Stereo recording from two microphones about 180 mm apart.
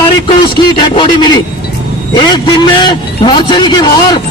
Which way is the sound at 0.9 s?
25° left (ahead or behind).